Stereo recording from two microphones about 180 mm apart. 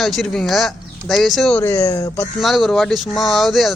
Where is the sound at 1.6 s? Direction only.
15° left (ahead or behind).